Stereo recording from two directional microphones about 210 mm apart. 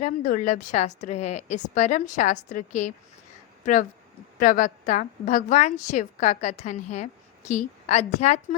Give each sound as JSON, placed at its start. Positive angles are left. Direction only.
{"t": 0.0, "sound": "a woman's voice", "side_deg": 40}